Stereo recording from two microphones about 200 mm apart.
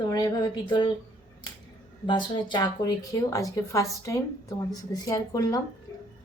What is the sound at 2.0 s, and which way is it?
A woman's voice, 20° left (ahead or behind).